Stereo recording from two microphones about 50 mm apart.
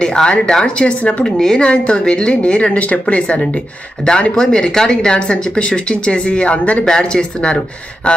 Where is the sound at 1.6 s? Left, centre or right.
Left.